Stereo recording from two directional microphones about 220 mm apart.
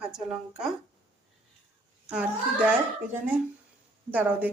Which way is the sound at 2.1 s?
5° right (ahead or behind).